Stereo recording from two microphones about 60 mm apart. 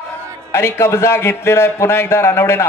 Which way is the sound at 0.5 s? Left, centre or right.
Left.